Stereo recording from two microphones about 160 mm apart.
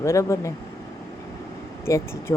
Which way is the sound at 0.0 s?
20° left (ahead or behind).